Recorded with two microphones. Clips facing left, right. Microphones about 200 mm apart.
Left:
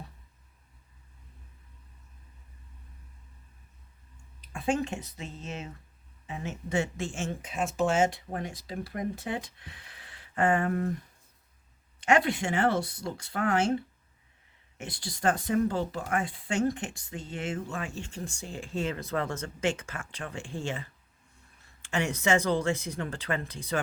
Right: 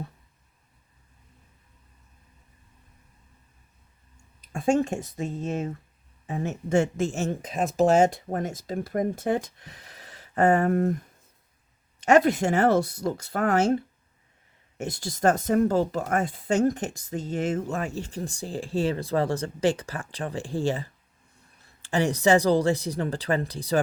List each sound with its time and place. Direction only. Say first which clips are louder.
4.4 s speech: right 6 dB; 45° right (ahead or behind)
11.9 s speech: right 6 dB; 40° right (ahead or behind)
14.8 s speech: right 9 dB; 45° right (ahead or behind)